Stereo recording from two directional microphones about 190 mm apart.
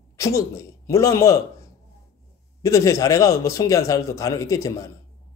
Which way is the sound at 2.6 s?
15° left (ahead or behind).